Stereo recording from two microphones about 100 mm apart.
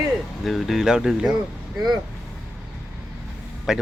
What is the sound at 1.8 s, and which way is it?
Speech, 45° right (ahead or behind).